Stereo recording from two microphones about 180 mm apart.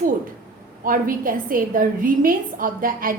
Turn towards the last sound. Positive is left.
turn(degrees=-50)  # may be behind; listen again after turning